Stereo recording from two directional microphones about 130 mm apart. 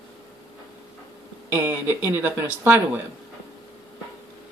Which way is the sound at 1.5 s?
15° right (ahead or behind).